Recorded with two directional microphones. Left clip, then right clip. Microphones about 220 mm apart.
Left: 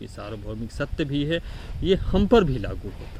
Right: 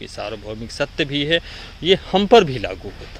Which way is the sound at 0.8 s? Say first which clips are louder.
Right 6 dB; 15° left (ahead or behind).